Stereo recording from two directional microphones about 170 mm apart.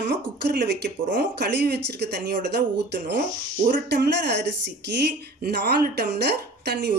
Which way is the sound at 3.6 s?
65° right (ahead or behind).